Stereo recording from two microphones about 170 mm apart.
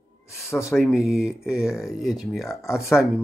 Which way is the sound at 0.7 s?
Centre (ahead or behind).